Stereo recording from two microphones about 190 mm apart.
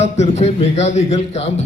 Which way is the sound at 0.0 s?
35° left (ahead or behind).